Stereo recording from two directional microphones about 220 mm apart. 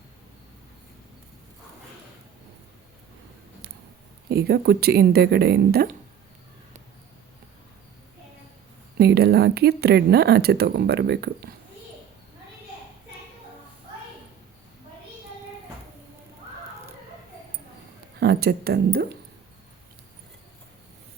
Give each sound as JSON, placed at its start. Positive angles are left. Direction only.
{"t": 4.3, "sound": "speech", "side_deg": -45}
{"t": 9.0, "sound": "speech", "side_deg": -45}
{"t": 18.2, "sound": "speech", "side_deg": -45}